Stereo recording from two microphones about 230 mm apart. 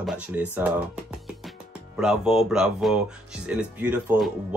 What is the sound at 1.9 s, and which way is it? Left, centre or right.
Speech, centre.